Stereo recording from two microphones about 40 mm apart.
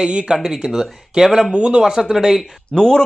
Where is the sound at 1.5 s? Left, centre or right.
Right.